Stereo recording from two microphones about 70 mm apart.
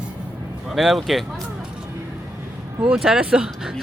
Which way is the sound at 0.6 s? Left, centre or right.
Centre.